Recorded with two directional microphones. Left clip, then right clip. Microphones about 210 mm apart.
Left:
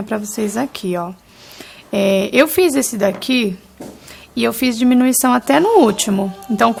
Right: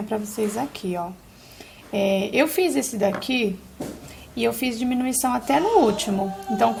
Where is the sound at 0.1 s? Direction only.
30° left (ahead or behind).